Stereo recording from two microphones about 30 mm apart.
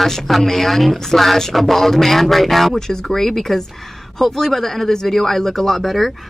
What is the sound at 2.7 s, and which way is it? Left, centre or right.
A man's voice, centre.